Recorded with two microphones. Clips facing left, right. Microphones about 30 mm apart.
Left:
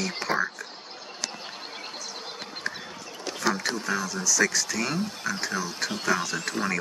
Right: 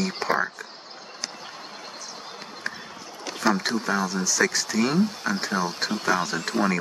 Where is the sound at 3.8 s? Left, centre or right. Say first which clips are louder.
Right 1 dB; right.